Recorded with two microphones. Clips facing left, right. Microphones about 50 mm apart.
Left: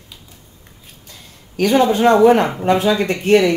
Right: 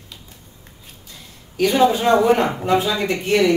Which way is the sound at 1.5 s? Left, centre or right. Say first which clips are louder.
Left 1 dB; left.